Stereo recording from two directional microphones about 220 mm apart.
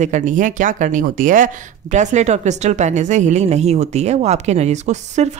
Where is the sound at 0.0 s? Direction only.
35° right (ahead or behind).